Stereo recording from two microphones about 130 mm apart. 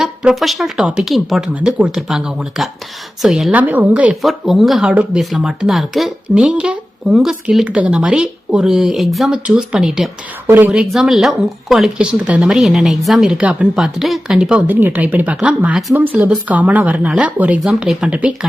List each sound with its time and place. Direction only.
0.0 s a woman's voice: 5° right (ahead or behind)
10.4 s a woman's voice: 15° right (ahead or behind)
10.7 s a woman's voice: 5° right (ahead or behind)